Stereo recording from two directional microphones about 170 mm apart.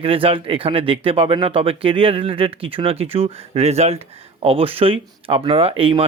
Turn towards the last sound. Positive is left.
turn(degrees=-35)  # may be behind; listen again after turning